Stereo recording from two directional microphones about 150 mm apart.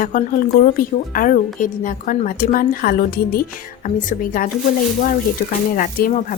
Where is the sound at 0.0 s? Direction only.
60° left (ahead or behind).